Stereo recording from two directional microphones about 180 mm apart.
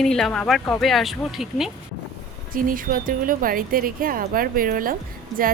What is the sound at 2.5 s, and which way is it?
Speech, 50° right (ahead or behind).